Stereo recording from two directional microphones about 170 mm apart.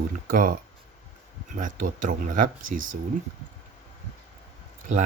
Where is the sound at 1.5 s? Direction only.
50° right (ahead or behind).